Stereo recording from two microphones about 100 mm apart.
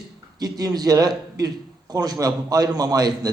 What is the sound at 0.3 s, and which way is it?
A man's voice, 40° right (ahead or behind).